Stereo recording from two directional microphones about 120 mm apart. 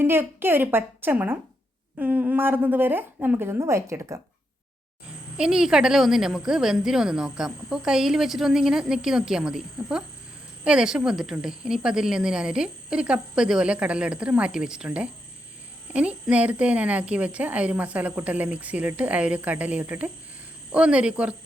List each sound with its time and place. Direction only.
0.0 s a woman's voice: 20° right (ahead or behind)
5.4 s a woman's voice: 5° right (ahead or behind)